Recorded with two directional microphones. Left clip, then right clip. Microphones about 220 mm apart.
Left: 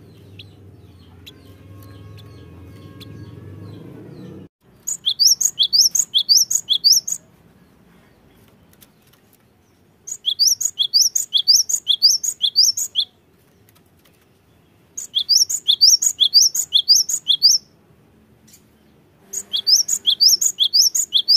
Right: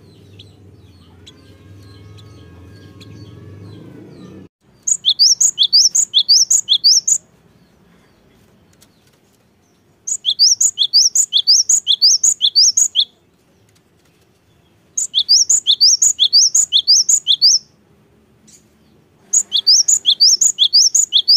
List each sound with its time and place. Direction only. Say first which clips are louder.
0.4 s chicken: left 1 dB; 30° left (ahead or behind)
5.0 s chirp: right 4 dB; centre (ahead or behind)
10.0 s chirp: right 5 dB; centre (ahead or behind)
15.0 s chirp: right 4 dB; centre (ahead or behind)
19.3 s chirp: right 5 dB; centre (ahead or behind)